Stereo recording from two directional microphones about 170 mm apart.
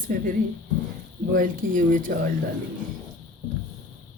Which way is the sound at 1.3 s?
55° right (ahead or behind).